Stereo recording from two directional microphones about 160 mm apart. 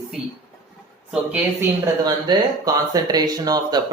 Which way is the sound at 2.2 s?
25° right (ahead or behind).